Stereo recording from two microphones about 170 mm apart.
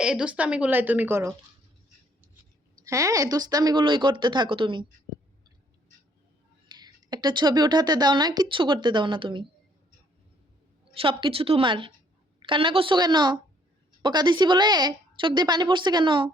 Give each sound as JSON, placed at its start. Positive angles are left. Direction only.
{"t": 0.0, "sound": "a woman's voice", "side_deg": -5}
{"t": 2.7, "sound": "speech", "side_deg": -20}
{"t": 6.7, "sound": "speech", "side_deg": -25}
{"t": 10.9, "sound": "a woman's voice", "side_deg": -30}